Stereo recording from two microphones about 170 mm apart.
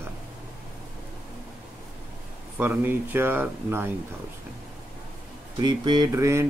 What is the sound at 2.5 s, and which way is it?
Speech, 10° right (ahead or behind).